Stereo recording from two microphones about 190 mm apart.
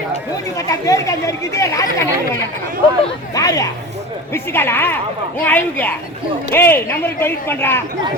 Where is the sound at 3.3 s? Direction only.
20° left (ahead or behind).